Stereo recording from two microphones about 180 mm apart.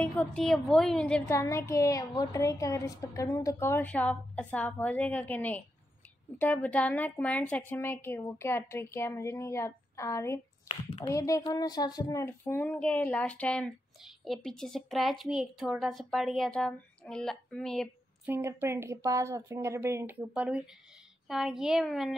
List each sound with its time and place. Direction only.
0.0 s a woman's voice: 5° left (ahead or behind)
1.3 s a woman's voice: 15° left (ahead or behind)
10.7 s a woman's voice: 30° left (ahead or behind); by 17.8 s 5° left (ahead or behind)
18.2 s a woman's voice: 15° right (ahead or behind)